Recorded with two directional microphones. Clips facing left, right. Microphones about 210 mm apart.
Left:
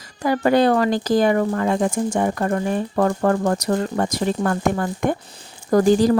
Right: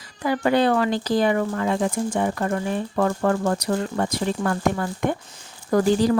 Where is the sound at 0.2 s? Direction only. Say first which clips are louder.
Left 3 dB; 45° left (ahead or behind).